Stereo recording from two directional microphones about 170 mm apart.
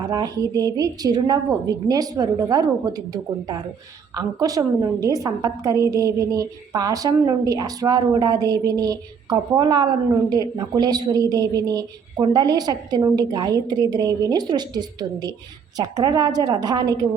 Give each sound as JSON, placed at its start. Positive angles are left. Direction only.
{"t": 0.0, "sound": "a woman's voice", "side_deg": -20}